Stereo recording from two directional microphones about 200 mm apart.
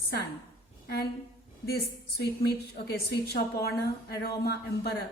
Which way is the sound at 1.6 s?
55° left (ahead or behind).